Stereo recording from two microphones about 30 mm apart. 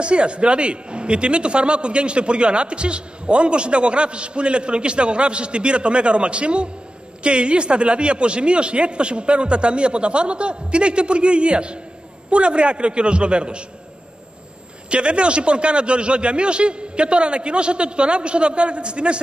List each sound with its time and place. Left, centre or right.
0.0 s a man's voice: right
14.9 s a man's voice: right